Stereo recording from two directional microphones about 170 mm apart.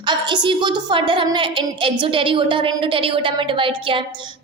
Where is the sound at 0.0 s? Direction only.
25° right (ahead or behind).